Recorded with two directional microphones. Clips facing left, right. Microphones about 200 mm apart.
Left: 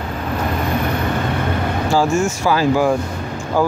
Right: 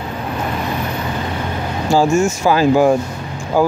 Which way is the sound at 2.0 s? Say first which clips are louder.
Right 4 dB; 20° right (ahead or behind).